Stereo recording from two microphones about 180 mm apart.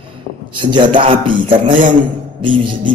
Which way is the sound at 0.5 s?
25° right (ahead or behind).